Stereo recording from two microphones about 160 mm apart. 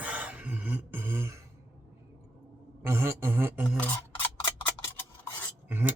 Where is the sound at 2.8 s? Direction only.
15° right (ahead or behind).